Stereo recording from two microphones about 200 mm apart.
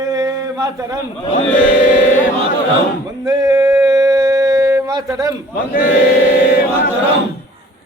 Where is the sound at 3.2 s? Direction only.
20° right (ahead or behind).